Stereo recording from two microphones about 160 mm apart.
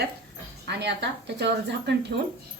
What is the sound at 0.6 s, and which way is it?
A woman's voice, 90° right.